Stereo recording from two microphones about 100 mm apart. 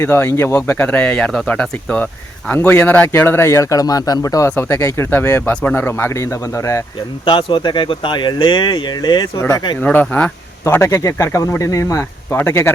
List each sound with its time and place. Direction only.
0.0 s speech: 25° left (ahead or behind)
4.5 s speech: 25° left (ahead or behind)
7.3 s speech: 55° left (ahead or behind)
9.8 s speech: 20° left (ahead or behind)
10.6 s speech: 25° left (ahead or behind)